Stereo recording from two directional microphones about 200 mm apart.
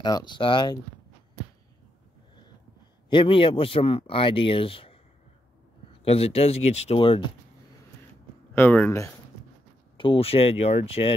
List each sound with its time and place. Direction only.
0.0 s speech: 20° left (ahead or behind)
3.1 s speech: 25° left (ahead or behind)
6.0 s speech: 30° left (ahead or behind)
8.5 s speech: 10° left (ahead or behind)
9.9 s speech: 25° left (ahead or behind)